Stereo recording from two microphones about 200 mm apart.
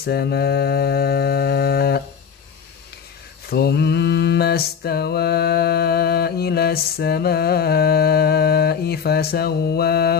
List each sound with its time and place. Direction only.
0.0 s mantra: 55° left (ahead or behind)
3.4 s mantra: 50° left (ahead or behind)